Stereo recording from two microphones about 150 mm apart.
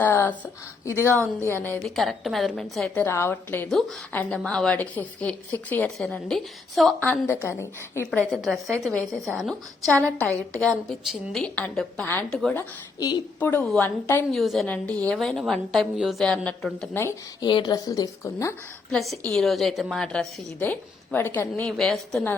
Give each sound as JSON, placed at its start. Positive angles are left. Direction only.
{"t": 0.0, "sound": "a sound", "side_deg": 10}
{"t": 0.9, "sound": "a woman's voice", "side_deg": 20}
{"t": 2.0, "sound": "a woman's voice", "side_deg": 0}
{"t": 3.7, "sound": "a woman's voice", "side_deg": 0}
{"t": 8.3, "sound": "a woman's voice", "side_deg": 0}
{"t": 13.0, "sound": "a woman's voice", "side_deg": 25}
{"t": 13.4, "sound": "a woman's voice", "side_deg": 10}
{"t": 14.3, "sound": "a woman's voice", "side_deg": 0}
{"t": 16.9, "sound": "a woman's voice", "side_deg": 15}
{"t": 17.4, "sound": "a woman's voice", "side_deg": 25}
{"t": 18.9, "sound": "a woman's voice", "side_deg": 0}
{"t": 20.6, "sound": "a woman's voice", "side_deg": 10}